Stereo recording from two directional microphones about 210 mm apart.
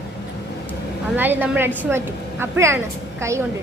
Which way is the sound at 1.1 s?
10° right (ahead or behind).